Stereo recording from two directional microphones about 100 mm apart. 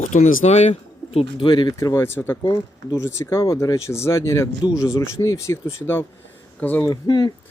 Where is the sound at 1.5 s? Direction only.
50° left (ahead or behind).